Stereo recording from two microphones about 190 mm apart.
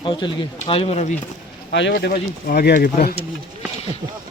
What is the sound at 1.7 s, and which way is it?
Speech, 65° left (ahead or behind).